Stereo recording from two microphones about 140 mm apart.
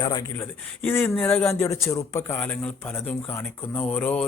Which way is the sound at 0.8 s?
15° left (ahead or behind).